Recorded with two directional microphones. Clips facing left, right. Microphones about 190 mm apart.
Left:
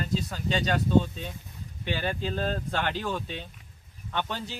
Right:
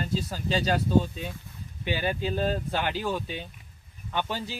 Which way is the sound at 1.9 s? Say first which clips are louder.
Right 2 dB; 10° right (ahead or behind).